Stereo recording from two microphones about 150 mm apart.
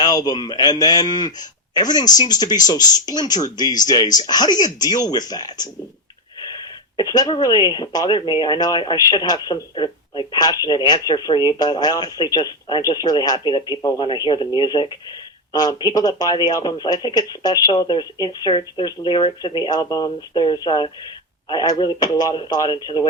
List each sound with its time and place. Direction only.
0.0 s a man's voice: 25° left (ahead or behind)
6.9 s a man's voice: 25° left (ahead or behind)